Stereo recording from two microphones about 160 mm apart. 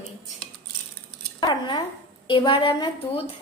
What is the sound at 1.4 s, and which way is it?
A woman's voice, 30° left (ahead or behind).